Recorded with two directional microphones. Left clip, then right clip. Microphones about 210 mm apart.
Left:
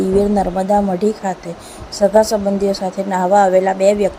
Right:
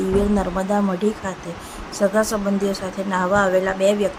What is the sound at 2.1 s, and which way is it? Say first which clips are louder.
A woman's voice: left 7 dB; 15° left (ahead or behind).